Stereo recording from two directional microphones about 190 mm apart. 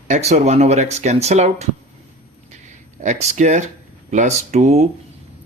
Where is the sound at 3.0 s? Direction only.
35° right (ahead or behind).